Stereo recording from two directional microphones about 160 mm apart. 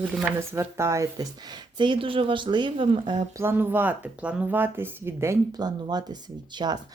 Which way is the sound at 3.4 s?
15° right (ahead or behind).